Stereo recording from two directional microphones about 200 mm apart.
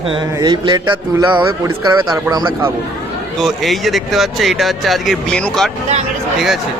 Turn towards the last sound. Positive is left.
turn(degrees=0)  # may be behind; listen again after turning